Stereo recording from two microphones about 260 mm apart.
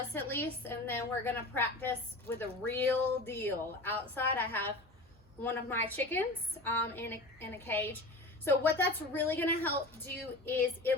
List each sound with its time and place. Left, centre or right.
0.1 s a woman's voice: centre